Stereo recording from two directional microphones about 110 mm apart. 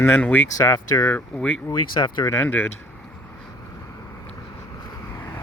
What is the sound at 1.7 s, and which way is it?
Speech, 45° left (ahead or behind).